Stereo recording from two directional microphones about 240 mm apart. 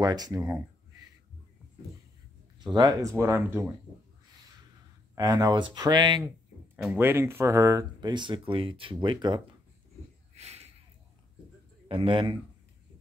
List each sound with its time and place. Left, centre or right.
0.0 s speech: centre
2.6 s speech: centre
5.1 s speech: centre
6.8 s speech: centre
10.3 s a sound: right
11.9 s a man's voice: right